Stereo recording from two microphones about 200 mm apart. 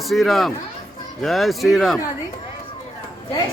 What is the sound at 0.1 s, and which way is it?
A man's voice, centre (ahead or behind).